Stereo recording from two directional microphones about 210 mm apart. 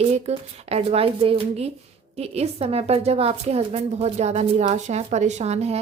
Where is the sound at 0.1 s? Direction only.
30° right (ahead or behind).